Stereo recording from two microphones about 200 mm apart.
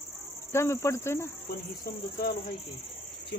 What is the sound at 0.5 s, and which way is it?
Speech, 15° left (ahead or behind).